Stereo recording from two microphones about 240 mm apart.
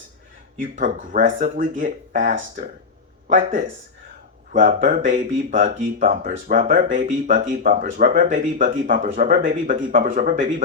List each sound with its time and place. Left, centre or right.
0.8 s speech: right